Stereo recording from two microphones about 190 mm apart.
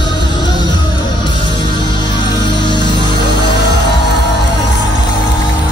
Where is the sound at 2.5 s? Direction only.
25° left (ahead or behind).